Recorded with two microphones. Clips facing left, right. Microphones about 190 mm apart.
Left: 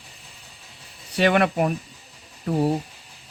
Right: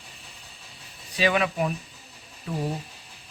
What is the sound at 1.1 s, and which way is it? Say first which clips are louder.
Speech: left 5 dB; 65° left (ahead or behind).